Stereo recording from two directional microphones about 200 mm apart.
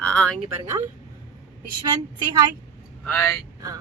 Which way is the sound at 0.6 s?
15° right (ahead or behind).